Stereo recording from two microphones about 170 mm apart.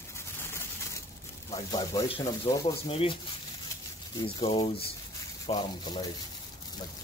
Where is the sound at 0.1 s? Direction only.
15° left (ahead or behind).